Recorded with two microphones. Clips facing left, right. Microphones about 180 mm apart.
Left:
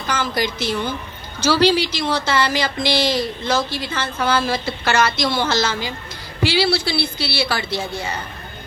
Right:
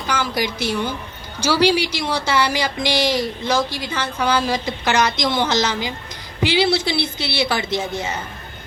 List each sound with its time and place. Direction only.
0.1 s a woman's voice: 10° right (ahead or behind)